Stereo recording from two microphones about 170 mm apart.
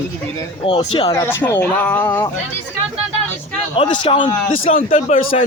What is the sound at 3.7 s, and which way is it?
Speech, 30° left (ahead or behind).